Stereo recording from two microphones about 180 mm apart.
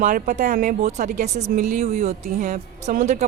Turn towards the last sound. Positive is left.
turn(degrees=-40)  # may be behind; listen again after turning